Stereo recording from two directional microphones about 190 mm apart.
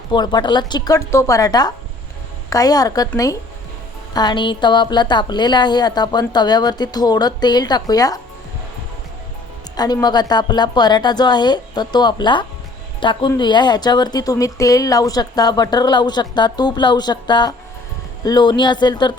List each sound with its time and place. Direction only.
0.1 s a woman's voice: 25° left (ahead or behind)
9.7 s a woman's voice: 20° left (ahead or behind)